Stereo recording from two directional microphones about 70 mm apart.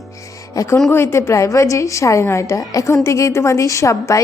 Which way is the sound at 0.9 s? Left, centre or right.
Left.